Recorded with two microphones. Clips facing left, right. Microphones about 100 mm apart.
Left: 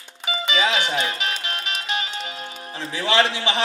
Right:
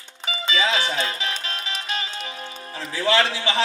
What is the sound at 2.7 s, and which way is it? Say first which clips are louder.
Speech: right 2 dB; 20° left (ahead or behind).